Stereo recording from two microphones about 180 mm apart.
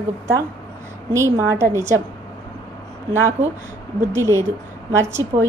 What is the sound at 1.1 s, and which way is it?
Speech, 15° right (ahead or behind).